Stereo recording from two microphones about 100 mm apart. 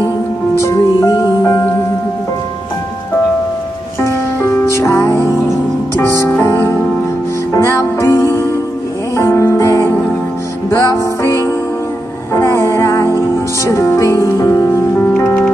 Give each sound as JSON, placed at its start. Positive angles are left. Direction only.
{"t": 0.6, "sound": "music", "side_deg": 30}
{"t": 4.0, "sound": "music", "side_deg": 25}